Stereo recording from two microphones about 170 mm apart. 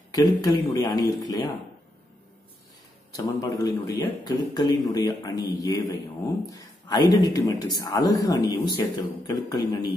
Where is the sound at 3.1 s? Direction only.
20° left (ahead or behind).